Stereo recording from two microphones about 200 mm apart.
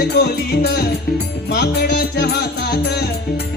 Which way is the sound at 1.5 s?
55° left (ahead or behind).